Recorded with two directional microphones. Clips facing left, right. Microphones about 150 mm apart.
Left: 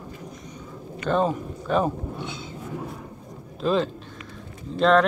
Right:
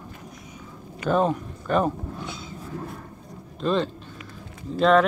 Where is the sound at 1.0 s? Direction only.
5° right (ahead or behind).